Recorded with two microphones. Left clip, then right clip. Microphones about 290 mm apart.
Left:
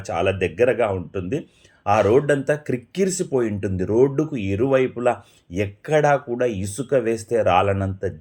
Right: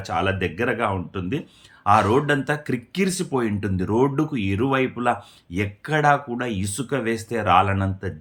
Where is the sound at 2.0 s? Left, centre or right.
Right.